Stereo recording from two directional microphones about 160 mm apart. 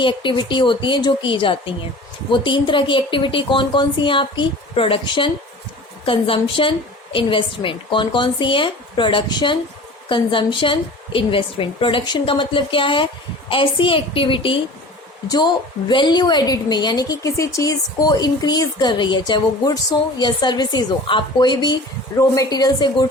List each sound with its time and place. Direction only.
0.0 s a woman's voice: 30° left (ahead or behind)